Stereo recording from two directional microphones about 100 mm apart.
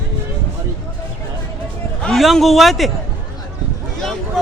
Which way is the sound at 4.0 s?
5° left (ahead or behind).